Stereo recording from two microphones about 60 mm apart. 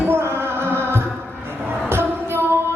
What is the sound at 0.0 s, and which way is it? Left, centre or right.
Music, right.